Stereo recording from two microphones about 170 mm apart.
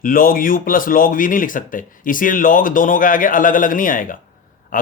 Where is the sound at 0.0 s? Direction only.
55° left (ahead or behind).